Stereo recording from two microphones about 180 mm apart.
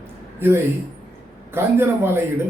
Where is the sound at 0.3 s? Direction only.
10° right (ahead or behind).